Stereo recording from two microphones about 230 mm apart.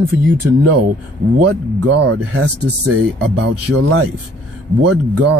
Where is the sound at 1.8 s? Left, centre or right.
Right.